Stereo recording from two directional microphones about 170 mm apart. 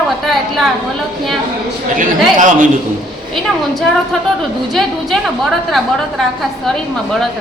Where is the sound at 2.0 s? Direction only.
50° right (ahead or behind).